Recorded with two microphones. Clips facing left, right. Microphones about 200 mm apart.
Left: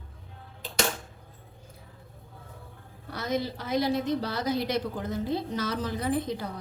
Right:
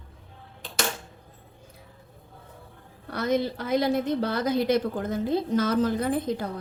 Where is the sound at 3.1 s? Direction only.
55° right (ahead or behind).